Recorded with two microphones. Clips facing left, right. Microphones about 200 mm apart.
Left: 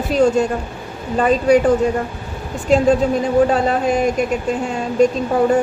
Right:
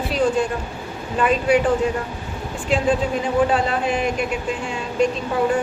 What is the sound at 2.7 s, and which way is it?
A woman's voice, 40° left (ahead or behind).